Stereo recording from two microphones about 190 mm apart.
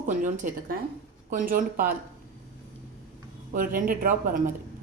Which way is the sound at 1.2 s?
45° right (ahead or behind).